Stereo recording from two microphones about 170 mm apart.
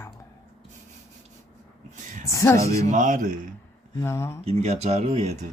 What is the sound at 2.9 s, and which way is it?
Speech, 50° right (ahead or behind).